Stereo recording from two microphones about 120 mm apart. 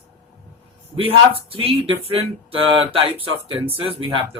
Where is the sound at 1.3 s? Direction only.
50° right (ahead or behind).